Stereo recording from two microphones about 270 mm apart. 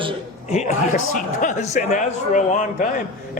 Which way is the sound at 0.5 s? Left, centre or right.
Left.